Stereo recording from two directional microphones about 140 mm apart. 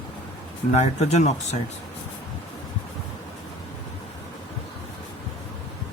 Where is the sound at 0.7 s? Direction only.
50° left (ahead or behind).